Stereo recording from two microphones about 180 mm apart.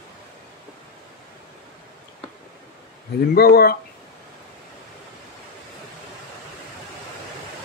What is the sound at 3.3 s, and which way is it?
Speech, 60° left (ahead or behind).